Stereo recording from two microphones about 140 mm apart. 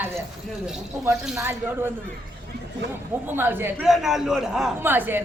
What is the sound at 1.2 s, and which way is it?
Speech, 5° right (ahead or behind).